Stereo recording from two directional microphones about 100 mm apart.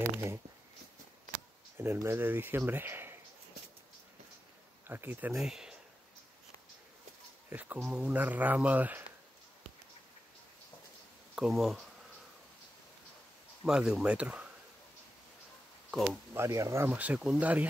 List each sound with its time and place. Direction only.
0.0 s speech: 25° right (ahead or behind)
1.8 s speech: 25° right (ahead or behind)
4.8 s speech: 20° right (ahead or behind)
5.3 s speech: 5° right (ahead or behind)
7.4 s speech: 15° right (ahead or behind)
11.3 s speech: 5° right (ahead or behind)
13.7 s speech: 5° right (ahead or behind)
15.9 s speech: centre (ahead or behind)
16.3 s speech: 30° right (ahead or behind)
16.9 s speech: 15° right (ahead or behind)